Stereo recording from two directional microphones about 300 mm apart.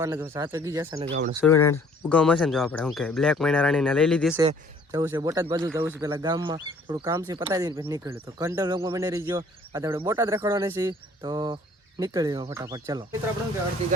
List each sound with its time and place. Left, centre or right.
0.0 s speech: centre
1.1 s speech: right
1.4 s speech: centre
4.4 s speech: centre